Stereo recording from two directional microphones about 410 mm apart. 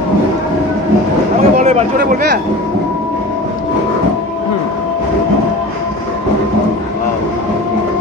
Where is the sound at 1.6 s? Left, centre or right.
Centre.